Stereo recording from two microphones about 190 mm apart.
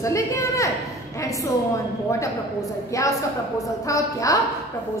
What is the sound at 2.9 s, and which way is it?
A woman's voice, 15° left (ahead or behind).